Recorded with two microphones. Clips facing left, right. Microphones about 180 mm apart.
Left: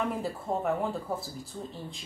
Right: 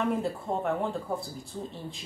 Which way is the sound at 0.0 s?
Centre (ahead or behind).